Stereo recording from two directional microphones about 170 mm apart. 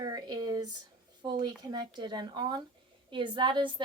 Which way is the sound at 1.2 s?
25° right (ahead or behind).